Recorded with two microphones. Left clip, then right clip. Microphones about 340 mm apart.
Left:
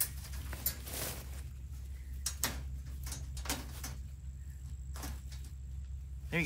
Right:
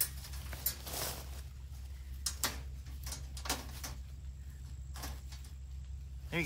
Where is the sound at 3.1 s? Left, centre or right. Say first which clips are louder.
Right 1 dB; centre.